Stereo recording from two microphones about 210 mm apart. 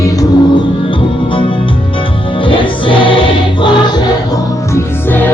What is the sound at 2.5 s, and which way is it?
Music, 25° left (ahead or behind).